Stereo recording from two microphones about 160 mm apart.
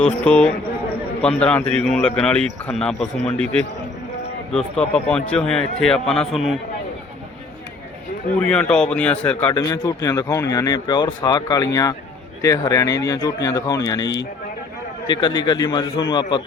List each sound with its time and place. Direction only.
0.0 s a man's voice: 5° left (ahead or behind)
5.1 s a man's voice: 5° left (ahead or behind)
8.4 s a man's voice: 5° left (ahead or behind)
9.5 s speech: 25° left (ahead or behind)